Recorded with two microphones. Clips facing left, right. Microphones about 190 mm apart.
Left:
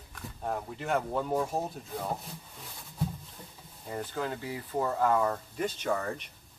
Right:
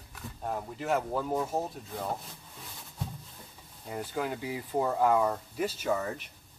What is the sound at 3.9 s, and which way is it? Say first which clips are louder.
Speech: right 1 dB; 15° right (ahead or behind).